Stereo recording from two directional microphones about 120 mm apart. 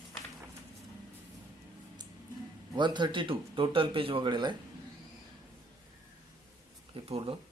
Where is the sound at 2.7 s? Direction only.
40° right (ahead or behind).